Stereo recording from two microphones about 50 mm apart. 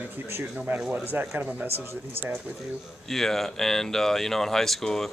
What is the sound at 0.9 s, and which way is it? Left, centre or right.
Speech, right.